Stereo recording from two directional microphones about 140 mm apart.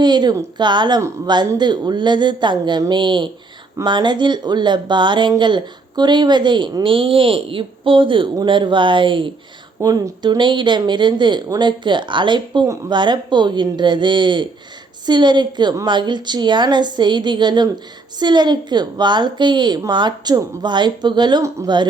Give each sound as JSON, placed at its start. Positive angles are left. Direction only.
{"t": 0.0, "sound": "speech", "side_deg": -30}